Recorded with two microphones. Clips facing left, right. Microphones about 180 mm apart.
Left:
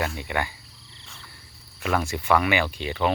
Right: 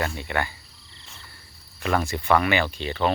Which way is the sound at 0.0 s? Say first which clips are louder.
Even; 10° left (ahead or behind).